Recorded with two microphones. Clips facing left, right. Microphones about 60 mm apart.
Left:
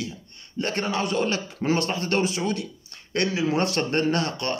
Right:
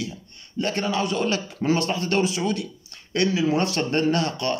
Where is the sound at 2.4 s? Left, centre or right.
Left.